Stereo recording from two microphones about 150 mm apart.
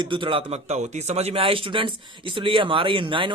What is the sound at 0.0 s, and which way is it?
A man's voice, 35° right (ahead or behind).